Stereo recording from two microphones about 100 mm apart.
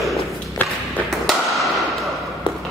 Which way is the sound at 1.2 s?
Centre (ahead or behind).